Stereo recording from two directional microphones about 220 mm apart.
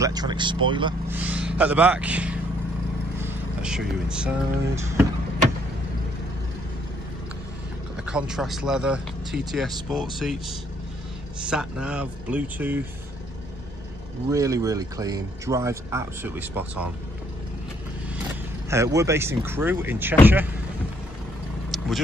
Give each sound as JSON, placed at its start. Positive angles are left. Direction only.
{"t": 0.0, "sound": "speech", "side_deg": -15}
{"t": 1.1, "sound": "speech", "side_deg": -5}
{"t": 8.1, "sound": "speech", "side_deg": -5}
{"t": 11.4, "sound": "speech", "side_deg": -5}
{"t": 14.3, "sound": "speech", "side_deg": -15}
{"t": 18.9, "sound": "speech", "side_deg": -10}
{"t": 21.6, "sound": "vehicle", "side_deg": 0}